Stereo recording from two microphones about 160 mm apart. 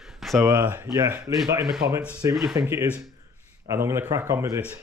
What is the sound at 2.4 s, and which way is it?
Speech, 15° right (ahead or behind).